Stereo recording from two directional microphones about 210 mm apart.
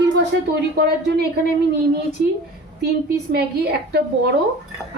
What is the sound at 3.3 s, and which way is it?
Speech, 50° right (ahead or behind).